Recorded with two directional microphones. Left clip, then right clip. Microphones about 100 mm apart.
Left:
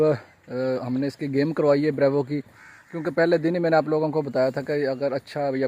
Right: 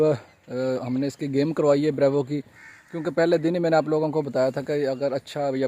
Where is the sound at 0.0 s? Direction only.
10° right (ahead or behind).